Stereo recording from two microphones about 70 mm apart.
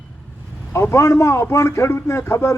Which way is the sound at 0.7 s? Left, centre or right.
Left.